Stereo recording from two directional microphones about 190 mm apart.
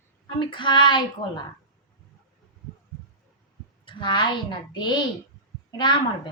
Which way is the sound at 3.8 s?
25° left (ahead or behind).